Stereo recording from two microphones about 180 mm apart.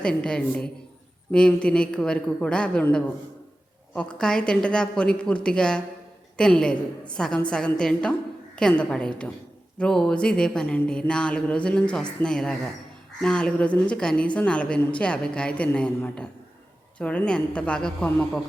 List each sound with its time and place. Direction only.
0.0 s a woman's voice: 5° left (ahead or behind)